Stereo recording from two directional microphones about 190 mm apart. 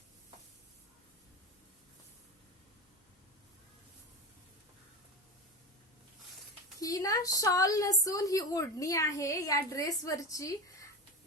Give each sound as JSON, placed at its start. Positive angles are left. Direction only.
{"t": 6.7, "sound": "a woman's voice", "side_deg": 15}